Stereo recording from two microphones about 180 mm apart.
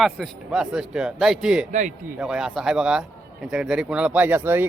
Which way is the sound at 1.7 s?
40° right (ahead or behind).